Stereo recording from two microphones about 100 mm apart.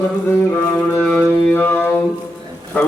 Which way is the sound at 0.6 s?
20° left (ahead or behind).